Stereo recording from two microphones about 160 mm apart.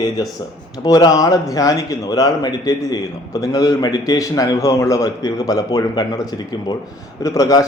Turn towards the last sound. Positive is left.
turn(degrees=20)  # may be behind; listen again after turning